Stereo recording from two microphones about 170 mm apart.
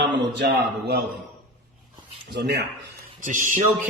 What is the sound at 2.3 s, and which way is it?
Speech, 85° right.